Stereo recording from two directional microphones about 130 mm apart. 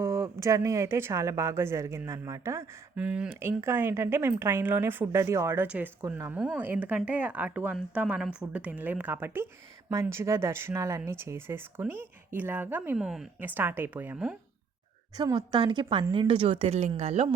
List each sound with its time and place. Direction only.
0.0 s speech: 25° right (ahead or behind)
2.9 s speech: 10° right (ahead or behind)
13.0 s speech: 5° right (ahead or behind)
13.4 s speech: 15° right (ahead or behind)
15.1 s speech: 35° right (ahead or behind); by 17.2 s 55° right (ahead or behind)